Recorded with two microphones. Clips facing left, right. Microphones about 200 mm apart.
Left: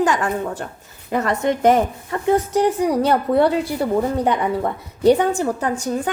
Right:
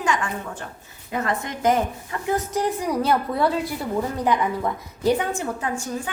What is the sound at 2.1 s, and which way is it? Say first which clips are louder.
A woman's voice: left 10 dB; 30° left (ahead or behind).